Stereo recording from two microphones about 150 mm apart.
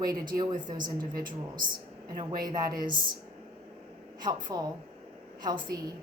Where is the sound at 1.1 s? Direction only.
70° right (ahead or behind).